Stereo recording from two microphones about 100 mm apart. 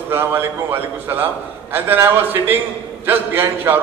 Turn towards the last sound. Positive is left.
turn(degrees=-20)  # may be behind; listen again after turning